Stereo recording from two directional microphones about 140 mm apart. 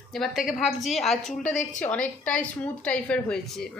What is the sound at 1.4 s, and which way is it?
Speech, 60° left (ahead or behind).